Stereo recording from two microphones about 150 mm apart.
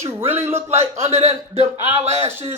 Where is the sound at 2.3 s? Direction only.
15° right (ahead or behind).